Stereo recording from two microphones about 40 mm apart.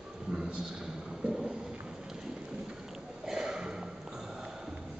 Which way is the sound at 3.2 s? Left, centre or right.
Centre.